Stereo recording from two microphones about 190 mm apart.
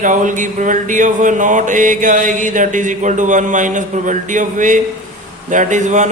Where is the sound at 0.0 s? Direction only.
45° right (ahead or behind).